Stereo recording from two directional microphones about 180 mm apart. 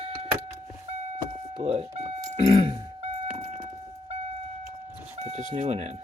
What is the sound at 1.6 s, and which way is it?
Music, 35° right (ahead or behind).